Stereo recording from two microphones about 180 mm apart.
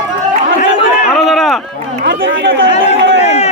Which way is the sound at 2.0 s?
90° right.